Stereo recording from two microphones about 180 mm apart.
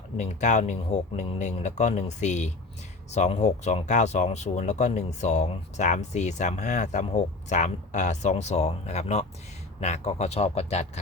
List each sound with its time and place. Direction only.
0.2 s speech: 40° left (ahead or behind)